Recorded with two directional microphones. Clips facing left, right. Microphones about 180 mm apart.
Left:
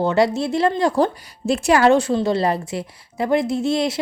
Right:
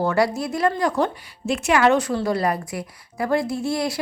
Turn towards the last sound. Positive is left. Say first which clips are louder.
# left 4 dB
turn(degrees=20)  # may be behind; listen again after turning